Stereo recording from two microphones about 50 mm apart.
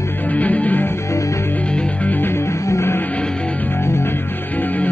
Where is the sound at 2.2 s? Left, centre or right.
Left.